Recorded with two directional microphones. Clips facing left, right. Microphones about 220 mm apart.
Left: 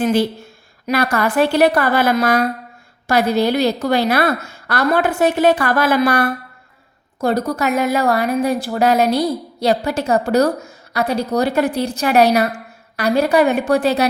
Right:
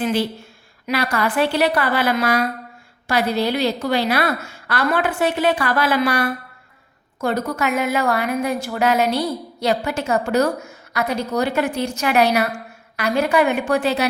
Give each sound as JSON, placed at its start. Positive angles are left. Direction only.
{"t": 0.0, "sound": "a woman's voice", "side_deg": 45}